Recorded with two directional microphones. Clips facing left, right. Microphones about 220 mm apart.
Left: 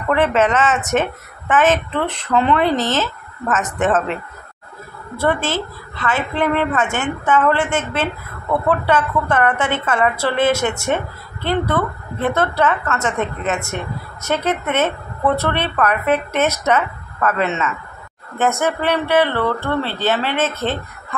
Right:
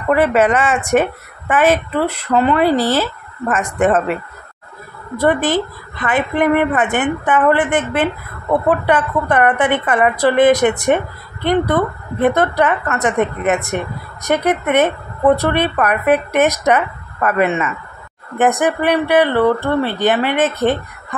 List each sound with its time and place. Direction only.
0.1 s speech: 10° right (ahead or behind)
5.2 s speech: 15° right (ahead or behind)
14.2 s speech: 15° right (ahead or behind)